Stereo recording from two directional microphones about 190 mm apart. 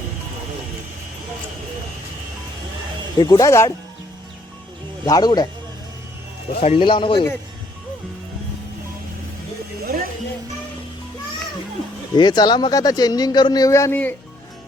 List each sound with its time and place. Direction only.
3.2 s speech: 20° left (ahead or behind)
5.0 s a man's voice: 20° left (ahead or behind)
6.6 s a man's voice: 30° left (ahead or behind)
9.8 s music: 50° right (ahead or behind)
12.1 s a man's voice: 25° left (ahead or behind)